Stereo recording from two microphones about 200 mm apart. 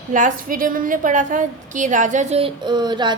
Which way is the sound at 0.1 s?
40° right (ahead or behind).